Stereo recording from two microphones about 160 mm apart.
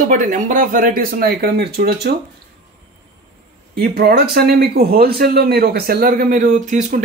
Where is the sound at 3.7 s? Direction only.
80° right; by 6.9 s 50° right (ahead or behind).